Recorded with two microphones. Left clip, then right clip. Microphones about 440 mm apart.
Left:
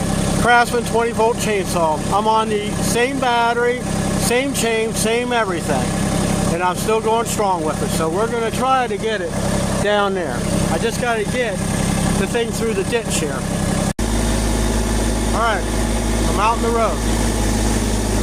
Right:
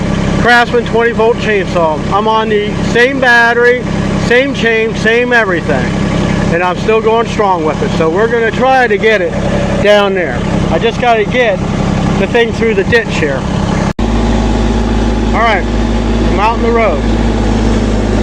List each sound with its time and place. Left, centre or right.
0.4 s speech: left
6.9 s speech: left
8.6 s speech: left
16.4 s speech: left